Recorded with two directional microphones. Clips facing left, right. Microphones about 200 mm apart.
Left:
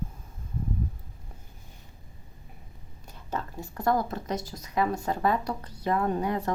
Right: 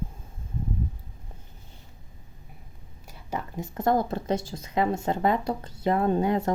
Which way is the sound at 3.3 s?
15° right (ahead or behind).